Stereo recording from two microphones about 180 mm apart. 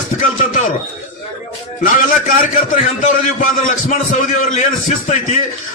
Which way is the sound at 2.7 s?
45° left (ahead or behind).